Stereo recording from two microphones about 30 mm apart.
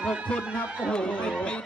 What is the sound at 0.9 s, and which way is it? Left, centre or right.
Speech, left.